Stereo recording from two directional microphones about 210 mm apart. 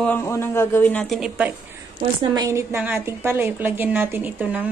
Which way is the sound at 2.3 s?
15° right (ahead or behind).